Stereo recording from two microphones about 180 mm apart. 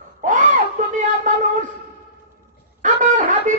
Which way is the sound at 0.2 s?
45° right (ahead or behind).